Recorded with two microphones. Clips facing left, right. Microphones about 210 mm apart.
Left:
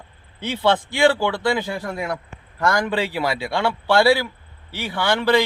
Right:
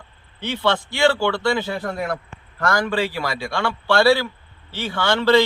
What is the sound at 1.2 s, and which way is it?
Speech, 20° left (ahead or behind).